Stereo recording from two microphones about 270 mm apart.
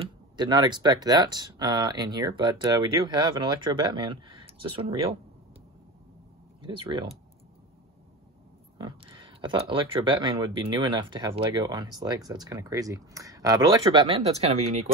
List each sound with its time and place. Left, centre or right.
0.0 s speech: centre
6.6 s speech: centre
8.7 s speech: centre